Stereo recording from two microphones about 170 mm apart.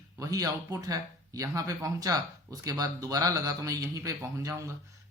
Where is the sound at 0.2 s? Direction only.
20° right (ahead or behind).